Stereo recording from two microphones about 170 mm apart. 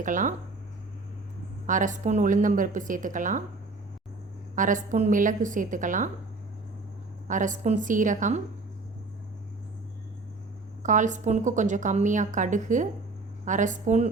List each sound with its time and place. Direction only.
0.0 s a woman's voice: 50° right (ahead or behind)
1.6 s a woman's voice: 50° right (ahead or behind)
4.5 s a woman's voice: 50° right (ahead or behind)
7.3 s a woman's voice: 50° right (ahead or behind)
10.8 s a woman's voice: 45° right (ahead or behind)